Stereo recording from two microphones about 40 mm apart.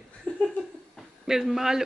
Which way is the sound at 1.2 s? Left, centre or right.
Centre.